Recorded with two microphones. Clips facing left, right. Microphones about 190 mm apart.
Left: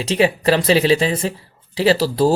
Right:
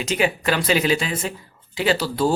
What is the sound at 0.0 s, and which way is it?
Speech, 35° left (ahead or behind).